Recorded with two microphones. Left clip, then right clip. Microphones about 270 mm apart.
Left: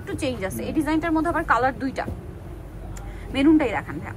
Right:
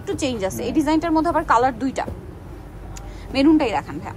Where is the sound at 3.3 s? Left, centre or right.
Centre.